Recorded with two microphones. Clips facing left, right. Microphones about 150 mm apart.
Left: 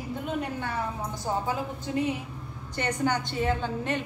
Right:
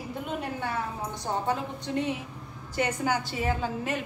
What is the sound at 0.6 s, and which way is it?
A woman's voice, centre (ahead or behind).